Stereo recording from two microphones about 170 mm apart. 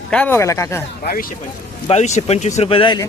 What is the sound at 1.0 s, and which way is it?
Speech, 60° left (ahead or behind).